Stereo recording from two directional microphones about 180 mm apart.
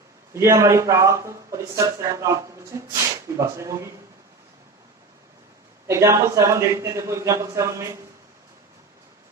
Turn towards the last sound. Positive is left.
turn(degrees=-15)  # may be behind; listen again after turning